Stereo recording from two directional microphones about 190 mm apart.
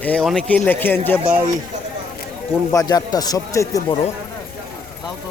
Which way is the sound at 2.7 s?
20° left (ahead or behind).